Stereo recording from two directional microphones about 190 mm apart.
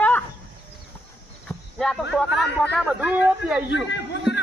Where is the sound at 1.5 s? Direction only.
5° left (ahead or behind).